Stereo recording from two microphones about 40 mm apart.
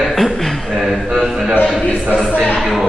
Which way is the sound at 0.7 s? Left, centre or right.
Centre.